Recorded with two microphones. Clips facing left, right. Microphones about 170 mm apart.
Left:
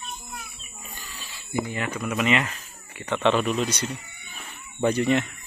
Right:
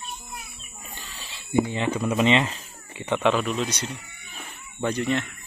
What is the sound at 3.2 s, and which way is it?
Speech, 5° right (ahead or behind).